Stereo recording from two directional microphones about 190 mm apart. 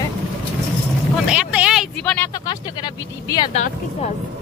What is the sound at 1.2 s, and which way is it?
Speech, 5° right (ahead or behind).